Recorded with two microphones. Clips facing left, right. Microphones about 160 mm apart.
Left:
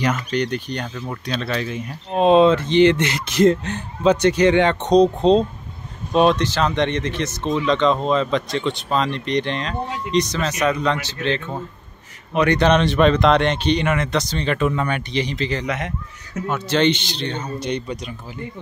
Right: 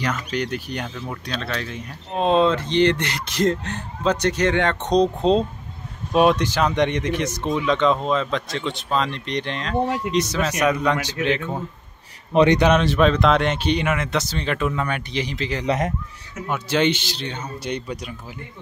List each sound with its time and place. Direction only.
0.3 s a man's voice: 5° right (ahead or behind)
12.5 s speech: 5° right (ahead or behind)
15.6 s speech: 35° right (ahead or behind)
16.4 s a man's voice: 10° right (ahead or behind)